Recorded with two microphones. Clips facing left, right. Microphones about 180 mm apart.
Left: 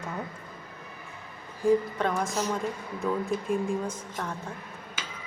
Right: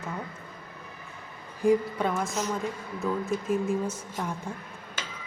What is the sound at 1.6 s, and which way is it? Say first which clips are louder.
A woman's voice: even; 10° right (ahead or behind).